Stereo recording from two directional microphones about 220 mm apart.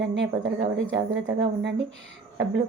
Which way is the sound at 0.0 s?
55° right (ahead or behind).